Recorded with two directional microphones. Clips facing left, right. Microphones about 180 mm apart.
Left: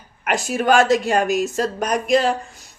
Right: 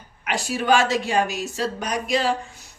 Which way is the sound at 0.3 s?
50° left (ahead or behind).